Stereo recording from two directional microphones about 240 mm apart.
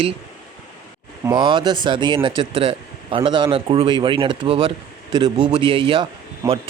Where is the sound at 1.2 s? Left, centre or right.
Centre.